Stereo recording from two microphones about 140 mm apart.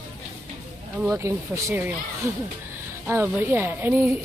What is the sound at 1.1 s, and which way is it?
Speech, 20° right (ahead or behind).